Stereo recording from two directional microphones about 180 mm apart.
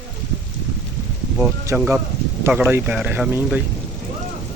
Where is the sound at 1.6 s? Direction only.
15° right (ahead or behind).